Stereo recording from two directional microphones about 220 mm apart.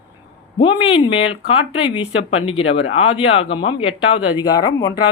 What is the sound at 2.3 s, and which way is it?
A woman's voice, 25° left (ahead or behind).